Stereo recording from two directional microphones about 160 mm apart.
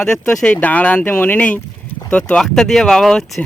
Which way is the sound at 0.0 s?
5° left (ahead or behind).